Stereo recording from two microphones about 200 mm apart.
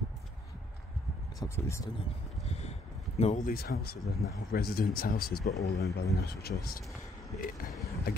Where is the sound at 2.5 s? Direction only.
35° left (ahead or behind); by 6.8 s 50° left (ahead or behind).